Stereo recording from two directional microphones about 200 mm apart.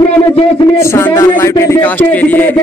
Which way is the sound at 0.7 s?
15° left (ahead or behind).